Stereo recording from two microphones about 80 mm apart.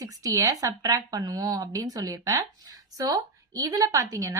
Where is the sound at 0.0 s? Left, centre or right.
Right.